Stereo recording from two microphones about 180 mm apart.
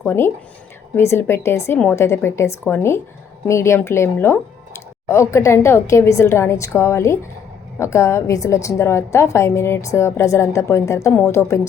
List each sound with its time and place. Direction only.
0.0 s speech: 10° left (ahead or behind)